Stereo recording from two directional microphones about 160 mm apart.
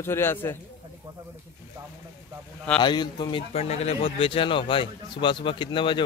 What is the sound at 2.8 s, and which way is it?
Speech, 25° left (ahead or behind).